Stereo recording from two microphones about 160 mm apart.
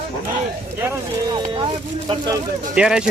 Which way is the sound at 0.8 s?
25° right (ahead or behind).